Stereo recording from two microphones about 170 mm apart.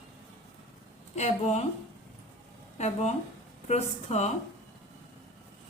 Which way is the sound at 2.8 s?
40° left (ahead or behind).